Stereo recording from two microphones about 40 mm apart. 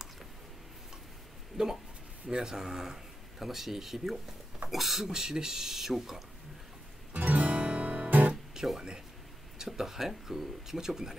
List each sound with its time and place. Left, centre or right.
1.6 s speech: centre
7.2 s music: right
8.1 s guitar: right
9.7 s speech: centre